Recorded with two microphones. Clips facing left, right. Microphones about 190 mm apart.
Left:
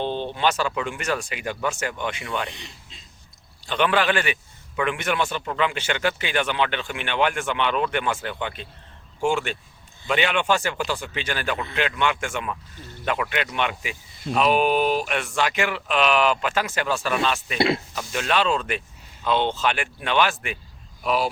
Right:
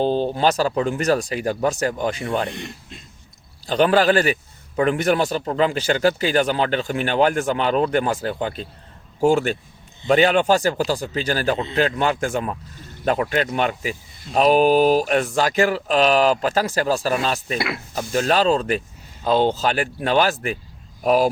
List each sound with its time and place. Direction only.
0.0 s a man's voice: 40° right (ahead or behind)
2.5 s speech: 55° right (ahead or behind)
3.7 s a man's voice: 35° right (ahead or behind)